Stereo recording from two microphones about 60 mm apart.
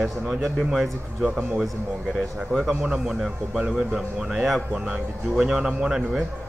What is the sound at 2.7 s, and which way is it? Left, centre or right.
A man's voice, centre.